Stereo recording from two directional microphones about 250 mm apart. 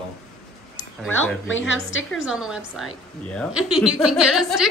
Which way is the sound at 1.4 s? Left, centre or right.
Left.